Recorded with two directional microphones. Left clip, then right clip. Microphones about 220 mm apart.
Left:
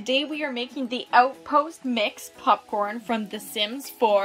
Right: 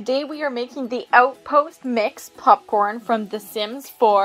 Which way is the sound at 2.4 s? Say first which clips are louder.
Right 7 dB; 25° right (ahead or behind).